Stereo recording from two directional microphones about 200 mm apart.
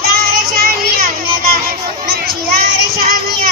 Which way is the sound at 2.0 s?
50° right (ahead or behind).